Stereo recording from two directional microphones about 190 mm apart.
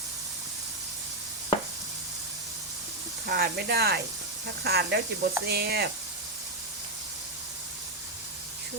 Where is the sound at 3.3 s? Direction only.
55° right (ahead or behind).